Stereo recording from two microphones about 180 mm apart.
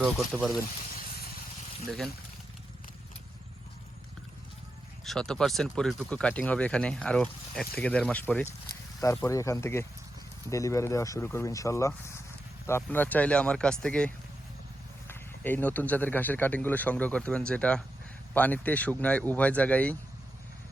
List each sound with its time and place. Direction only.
0.3 s speech: centre (ahead or behind)
5.0 s speech: 5° left (ahead or behind)